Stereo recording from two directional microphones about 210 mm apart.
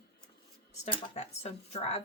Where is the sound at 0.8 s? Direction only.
30° left (ahead or behind).